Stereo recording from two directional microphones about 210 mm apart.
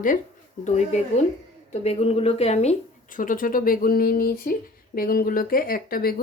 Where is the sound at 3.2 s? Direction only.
40° left (ahead or behind).